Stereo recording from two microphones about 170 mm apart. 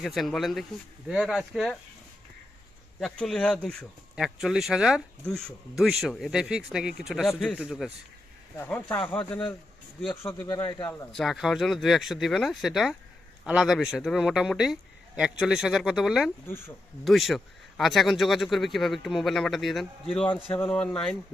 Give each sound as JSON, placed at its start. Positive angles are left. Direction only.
{"t": 0.0, "sound": "a man's voice", "side_deg": 0}
{"t": 3.0, "sound": "a man's voice", "side_deg": 5}
{"t": 8.5, "sound": "speech", "side_deg": 15}
{"t": 10.5, "sound": "speech", "side_deg": 25}
{"t": 11.1, "sound": "a man's voice", "side_deg": 0}
{"t": 20.5, "sound": "speech", "side_deg": 10}